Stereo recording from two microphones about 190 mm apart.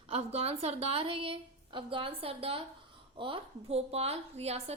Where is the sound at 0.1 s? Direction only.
35° right (ahead or behind).